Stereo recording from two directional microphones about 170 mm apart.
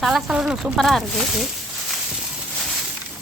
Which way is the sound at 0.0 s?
Centre (ahead or behind).